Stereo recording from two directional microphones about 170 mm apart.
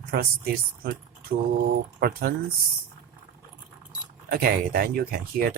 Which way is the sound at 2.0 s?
65° right (ahead or behind).